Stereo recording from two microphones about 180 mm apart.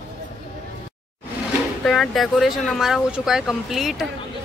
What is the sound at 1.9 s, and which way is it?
Speech, centre (ahead or behind).